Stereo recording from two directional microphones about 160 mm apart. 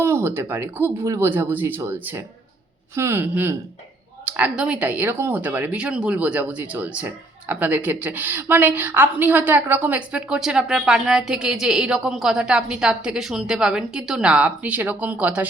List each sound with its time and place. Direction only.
0.0 s speech: 15° right (ahead or behind)